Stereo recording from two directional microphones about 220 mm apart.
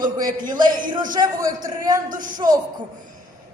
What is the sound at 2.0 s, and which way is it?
Speech, 35° right (ahead or behind).